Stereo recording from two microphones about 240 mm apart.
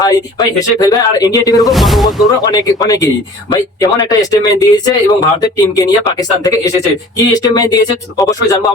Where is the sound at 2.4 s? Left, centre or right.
Centre.